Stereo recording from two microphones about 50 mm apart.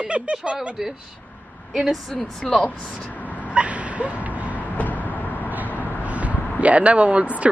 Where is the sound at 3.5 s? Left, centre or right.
Right.